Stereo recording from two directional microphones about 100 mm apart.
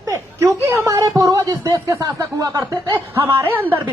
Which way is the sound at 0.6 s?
20° right (ahead or behind).